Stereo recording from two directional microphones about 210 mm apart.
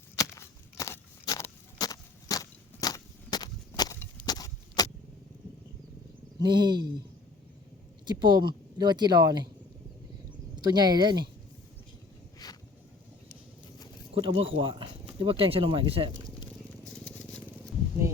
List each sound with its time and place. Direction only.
0.2 s a sound: 15° left (ahead or behind)
6.4 s speech: 20° right (ahead or behind)
8.0 s speech: 20° right (ahead or behind)
10.5 s speech: 20° right (ahead or behind)
14.1 s speech: 25° right (ahead or behind)
16.8 s a sound: 5° left (ahead or behind)